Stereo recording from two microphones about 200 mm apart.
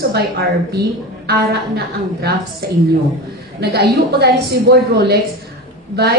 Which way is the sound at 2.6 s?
50° right (ahead or behind).